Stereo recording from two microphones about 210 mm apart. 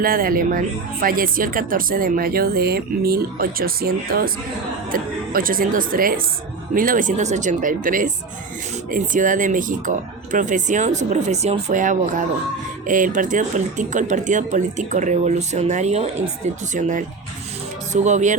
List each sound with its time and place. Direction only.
0.0 s speech: 45° right (ahead or behind)
17.9 s speech: 35° right (ahead or behind)